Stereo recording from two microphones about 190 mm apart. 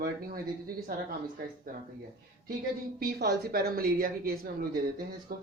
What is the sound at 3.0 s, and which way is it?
Speech, 55° right (ahead or behind).